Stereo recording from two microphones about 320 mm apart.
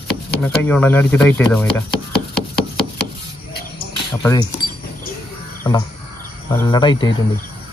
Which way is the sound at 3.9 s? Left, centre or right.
Centre.